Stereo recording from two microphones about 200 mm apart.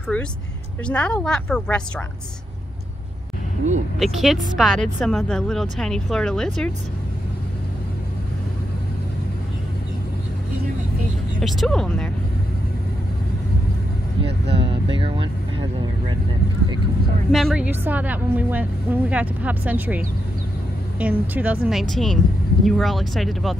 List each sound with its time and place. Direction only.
0.1 s a woman's voice: 5° left (ahead or behind)
4.0 s a woman's voice: centre (ahead or behind)
11.4 s a woman's voice: centre (ahead or behind)
14.5 s speech: 30° right (ahead or behind)
17.3 s a woman's voice: centre (ahead or behind)
21.0 s a woman's voice: 5° right (ahead or behind)